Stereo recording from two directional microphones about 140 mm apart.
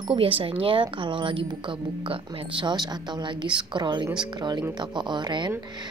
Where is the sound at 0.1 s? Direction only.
40° right (ahead or behind).